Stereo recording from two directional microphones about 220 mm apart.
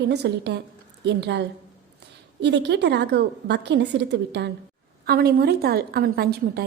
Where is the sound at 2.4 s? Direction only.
50° right (ahead or behind).